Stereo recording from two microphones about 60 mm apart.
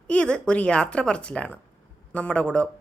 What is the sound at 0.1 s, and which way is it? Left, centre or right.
A woman's voice, centre.